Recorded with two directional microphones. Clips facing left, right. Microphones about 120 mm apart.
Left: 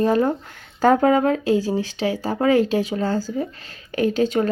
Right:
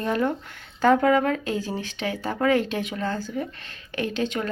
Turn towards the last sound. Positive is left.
turn(degrees=35)  # may be behind; listen again after turning